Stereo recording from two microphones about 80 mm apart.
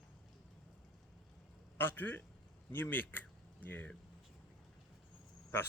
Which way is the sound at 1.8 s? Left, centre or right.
Left.